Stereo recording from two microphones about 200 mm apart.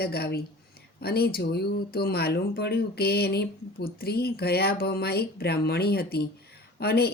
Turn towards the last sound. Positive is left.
turn(degrees=50)  # may be behind; listen again after turning